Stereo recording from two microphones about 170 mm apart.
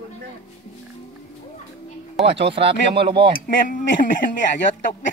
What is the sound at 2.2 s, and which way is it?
Speech, centre (ahead or behind).